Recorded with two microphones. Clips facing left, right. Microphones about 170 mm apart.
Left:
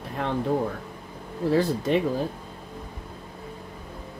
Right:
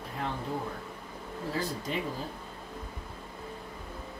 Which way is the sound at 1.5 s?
70° left (ahead or behind).